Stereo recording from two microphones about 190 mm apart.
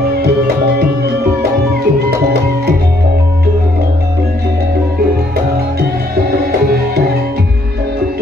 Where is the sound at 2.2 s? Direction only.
55° right (ahead or behind).